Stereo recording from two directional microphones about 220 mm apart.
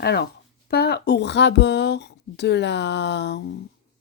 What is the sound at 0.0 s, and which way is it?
Speech, 45° left (ahead or behind).